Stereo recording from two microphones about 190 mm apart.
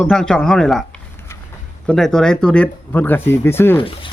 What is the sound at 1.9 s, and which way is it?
Speech, centre (ahead or behind).